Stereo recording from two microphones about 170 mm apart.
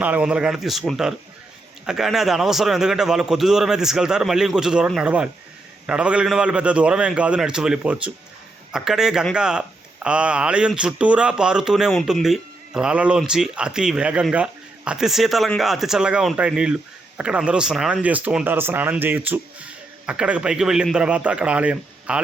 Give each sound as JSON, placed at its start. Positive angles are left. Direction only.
{"t": 0.0, "sound": "speech", "side_deg": -10}